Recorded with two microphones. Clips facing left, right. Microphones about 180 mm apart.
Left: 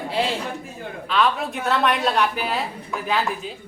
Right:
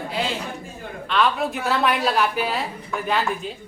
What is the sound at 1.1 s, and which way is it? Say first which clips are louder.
Speech: even; centre (ahead or behind).